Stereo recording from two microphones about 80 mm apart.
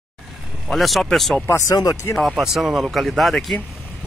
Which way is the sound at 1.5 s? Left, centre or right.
Left.